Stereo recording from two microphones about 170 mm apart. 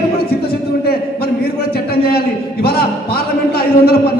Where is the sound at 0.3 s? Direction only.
65° left (ahead or behind).